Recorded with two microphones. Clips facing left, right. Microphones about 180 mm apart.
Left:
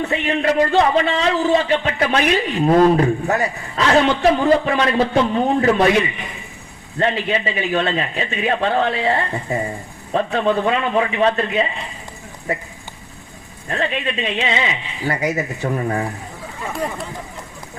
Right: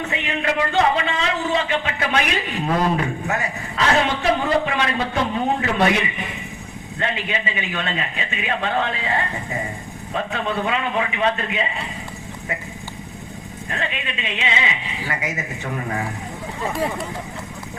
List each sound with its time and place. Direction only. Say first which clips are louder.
0.0 s a man's voice: left 5 dB; 35° left (ahead or behind)
7.0 s a man's voice: left 6 dB; 35° left (ahead or behind)
13.7 s a man's voice: left 7 dB; 35° left (ahead or behind)
16.7 s speech: even; centre (ahead or behind)